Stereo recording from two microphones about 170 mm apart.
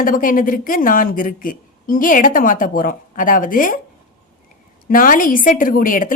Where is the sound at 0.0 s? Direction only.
55° left (ahead or behind).